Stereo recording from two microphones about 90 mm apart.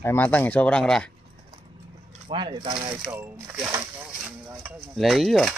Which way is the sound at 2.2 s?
65° right (ahead or behind).